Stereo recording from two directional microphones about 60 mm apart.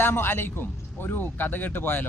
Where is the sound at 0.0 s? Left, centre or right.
Left.